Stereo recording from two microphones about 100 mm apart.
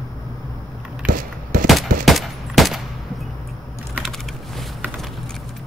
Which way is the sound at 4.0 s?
5° left (ahead or behind).